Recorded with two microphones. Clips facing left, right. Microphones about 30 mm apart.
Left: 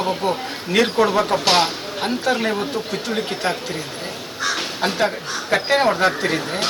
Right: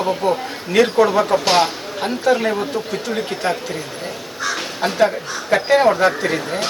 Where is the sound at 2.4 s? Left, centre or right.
Left.